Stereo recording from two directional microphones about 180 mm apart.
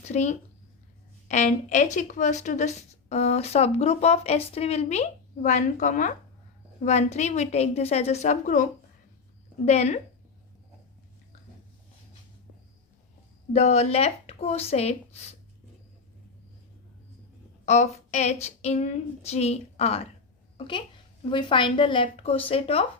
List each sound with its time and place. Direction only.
0.0 s speech: 40° left (ahead or behind)
9.6 s speech: 35° left (ahead or behind)
13.5 s speech: 40° left (ahead or behind)
17.7 s speech: 40° left (ahead or behind)
21.2 s speech: 30° left (ahead or behind)